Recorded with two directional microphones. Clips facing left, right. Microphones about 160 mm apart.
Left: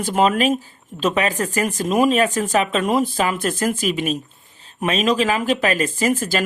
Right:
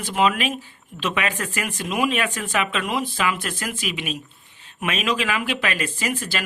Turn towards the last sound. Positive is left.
turn(degrees=45)  # may be behind; listen again after turning